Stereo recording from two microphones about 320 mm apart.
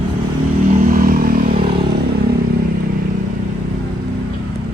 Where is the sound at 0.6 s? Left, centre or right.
Right.